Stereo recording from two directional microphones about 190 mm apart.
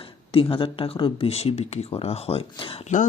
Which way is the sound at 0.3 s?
30° left (ahead or behind).